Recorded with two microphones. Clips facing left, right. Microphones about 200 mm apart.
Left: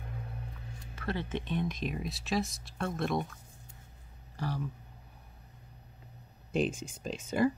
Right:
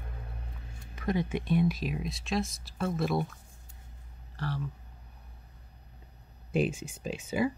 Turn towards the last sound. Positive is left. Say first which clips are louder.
# left 1 dB
turn(degrees=-5)  # may be behind; listen again after turning